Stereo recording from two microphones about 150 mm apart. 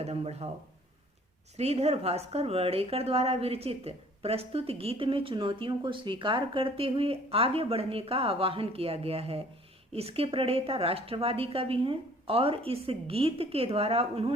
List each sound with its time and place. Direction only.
0.0 s speech: 45° right (ahead or behind)
1.5 s a woman's voice: 45° right (ahead or behind)